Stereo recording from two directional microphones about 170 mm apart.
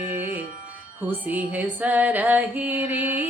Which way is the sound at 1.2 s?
10° right (ahead or behind).